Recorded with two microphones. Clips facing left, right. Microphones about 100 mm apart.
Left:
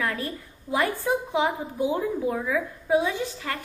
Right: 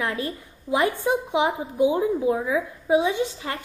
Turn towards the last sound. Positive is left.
turn(degrees=-20)  # may be behind; listen again after turning